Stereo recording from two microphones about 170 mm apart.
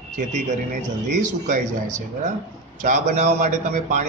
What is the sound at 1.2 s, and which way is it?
A man's voice, 45° right (ahead or behind).